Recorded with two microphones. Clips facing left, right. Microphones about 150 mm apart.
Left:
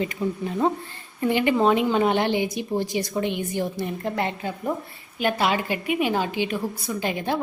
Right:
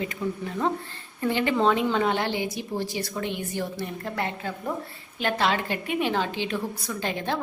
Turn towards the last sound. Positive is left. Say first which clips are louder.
# left 3 dB
turn(degrees=15)  # may be behind; listen again after turning